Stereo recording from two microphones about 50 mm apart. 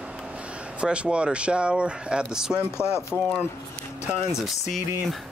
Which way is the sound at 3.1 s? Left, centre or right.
Centre.